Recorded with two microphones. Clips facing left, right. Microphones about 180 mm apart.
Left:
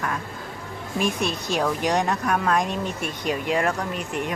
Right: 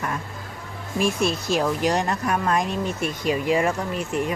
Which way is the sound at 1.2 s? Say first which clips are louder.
Right 2 dB; 5° right (ahead or behind).